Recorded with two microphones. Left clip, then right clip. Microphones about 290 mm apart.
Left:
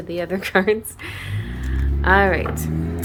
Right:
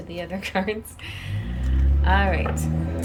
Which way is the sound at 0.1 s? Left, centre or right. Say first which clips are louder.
Left 8 dB; centre.